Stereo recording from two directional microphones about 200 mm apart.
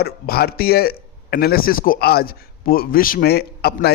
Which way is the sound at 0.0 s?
50° left (ahead or behind).